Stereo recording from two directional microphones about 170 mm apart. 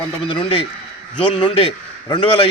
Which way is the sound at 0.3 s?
30° left (ahead or behind).